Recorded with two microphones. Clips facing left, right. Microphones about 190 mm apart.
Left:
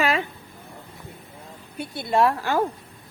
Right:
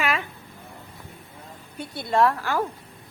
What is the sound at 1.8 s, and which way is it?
Speech, 10° left (ahead or behind).